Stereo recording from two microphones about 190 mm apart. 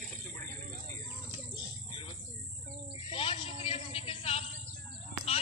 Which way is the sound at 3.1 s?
30° left (ahead or behind).